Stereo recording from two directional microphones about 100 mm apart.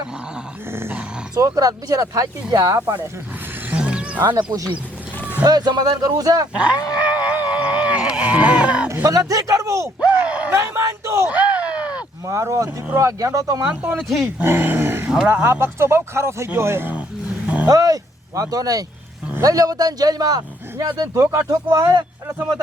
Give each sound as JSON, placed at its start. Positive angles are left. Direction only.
{"t": 0.7, "sound": "grunt", "side_deg": -20}
{"t": 1.4, "sound": "speech", "side_deg": -40}
{"t": 3.7, "sound": "a sound", "side_deg": -10}
{"t": 4.4, "sound": "speech", "side_deg": -35}
{"t": 6.5, "sound": "a sound", "side_deg": -10}
{"t": 9.0, "sound": "speech", "side_deg": -35}
{"t": 10.0, "sound": "groan", "side_deg": -10}
{"t": 10.5, "sound": "a sound", "side_deg": -30}
{"t": 11.3, "sound": "a sound", "side_deg": -15}
{"t": 12.2, "sound": "speech", "side_deg": -30}
{"t": 14.3, "sound": "speech", "side_deg": -20}
{"t": 15.0, "sound": "speech", "side_deg": -5}
{"t": 15.3, "sound": "speech", "side_deg": -20}
{"t": 17.7, "sound": "speech", "side_deg": -35}